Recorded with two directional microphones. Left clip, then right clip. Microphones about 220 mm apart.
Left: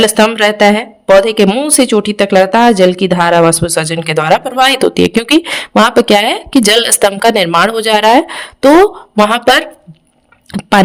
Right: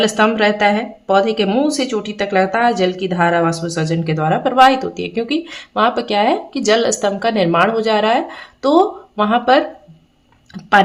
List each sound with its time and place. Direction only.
0.0 s a woman's voice: 50° left (ahead or behind)
4.4 s speech: centre (ahead or behind)
4.7 s a woman's voice: 50° left (ahead or behind)